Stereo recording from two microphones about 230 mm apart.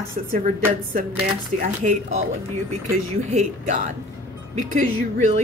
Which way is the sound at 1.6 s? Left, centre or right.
Right.